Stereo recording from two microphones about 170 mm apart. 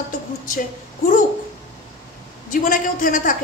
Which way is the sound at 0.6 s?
55° left (ahead or behind).